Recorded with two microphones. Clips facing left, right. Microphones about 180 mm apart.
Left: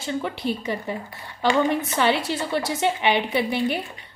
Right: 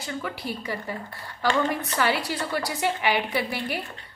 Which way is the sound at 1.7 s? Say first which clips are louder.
Left 4 dB; 25° left (ahead or behind).